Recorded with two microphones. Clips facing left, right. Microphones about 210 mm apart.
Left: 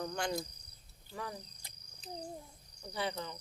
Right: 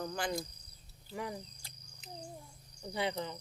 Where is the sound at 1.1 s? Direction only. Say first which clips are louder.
Right 3 dB; 15° right (ahead or behind).